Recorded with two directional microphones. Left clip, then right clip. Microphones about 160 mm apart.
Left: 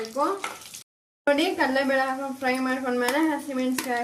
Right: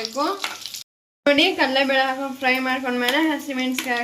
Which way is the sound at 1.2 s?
10° right (ahead or behind).